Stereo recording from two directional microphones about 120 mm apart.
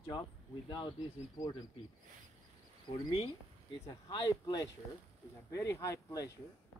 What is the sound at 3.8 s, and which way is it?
Speech, 35° left (ahead or behind).